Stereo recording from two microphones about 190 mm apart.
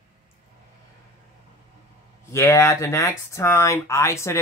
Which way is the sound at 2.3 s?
15° left (ahead or behind).